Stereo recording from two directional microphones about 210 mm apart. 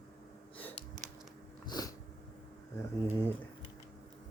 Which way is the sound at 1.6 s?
20° left (ahead or behind).